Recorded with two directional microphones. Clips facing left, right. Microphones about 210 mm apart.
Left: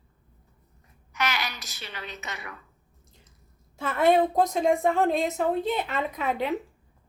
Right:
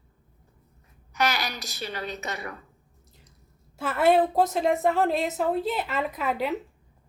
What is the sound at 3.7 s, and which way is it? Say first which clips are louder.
A woman's voice: even; 5° right (ahead or behind).